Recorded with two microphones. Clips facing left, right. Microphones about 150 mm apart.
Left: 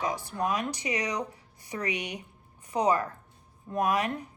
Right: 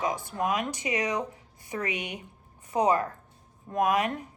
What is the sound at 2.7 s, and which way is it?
Speech, 25° right (ahead or behind).